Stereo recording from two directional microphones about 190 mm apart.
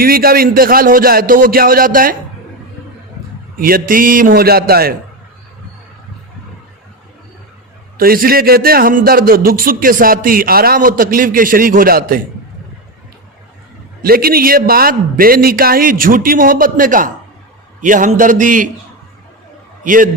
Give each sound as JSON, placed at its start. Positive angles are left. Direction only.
{"t": 0.0, "sound": "a man's voice", "side_deg": -50}
{"t": 3.6, "sound": "a man's voice", "side_deg": -50}
{"t": 7.9, "sound": "a man's voice", "side_deg": -50}
{"t": 14.0, "sound": "a man's voice", "side_deg": -50}
{"t": 19.8, "sound": "a man's voice", "side_deg": -45}